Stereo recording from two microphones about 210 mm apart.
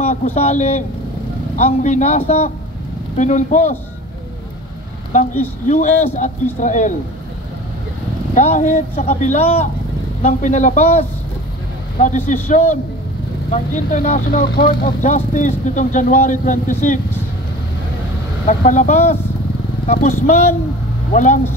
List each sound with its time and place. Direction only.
0.0 s speech: 40° left (ahead or behind)
5.7 s speech: 35° left (ahead or behind)
8.4 s speech: 35° left (ahead or behind)
18.5 s speech: 35° left (ahead or behind)